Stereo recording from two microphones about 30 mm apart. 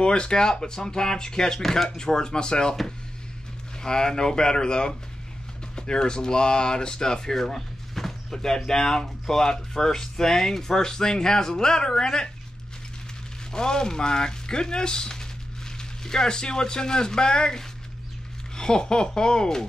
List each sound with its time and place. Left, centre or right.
0.0 s speech: left
1.6 s speech: centre
2.0 s speech: left
3.8 s speech: left
13.5 s speech: left